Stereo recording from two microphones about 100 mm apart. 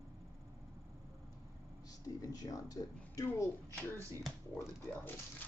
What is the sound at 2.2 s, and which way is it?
Speech, 40° left (ahead or behind).